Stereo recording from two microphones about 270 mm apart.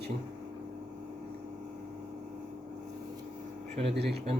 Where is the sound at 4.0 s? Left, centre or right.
Right.